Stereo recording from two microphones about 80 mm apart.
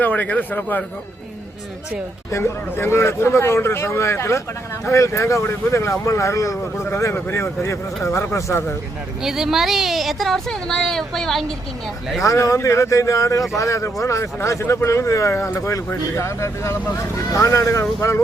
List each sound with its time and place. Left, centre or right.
0.0 s a man's voice: left
2.3 s speech: left
6.9 s speech: left
9.2 s speech: centre
12.2 s speech: left